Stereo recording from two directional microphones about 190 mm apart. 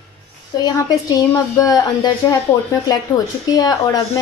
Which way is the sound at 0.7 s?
20° left (ahead or behind).